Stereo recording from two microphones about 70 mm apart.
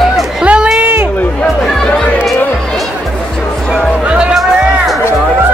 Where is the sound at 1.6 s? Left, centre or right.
Centre.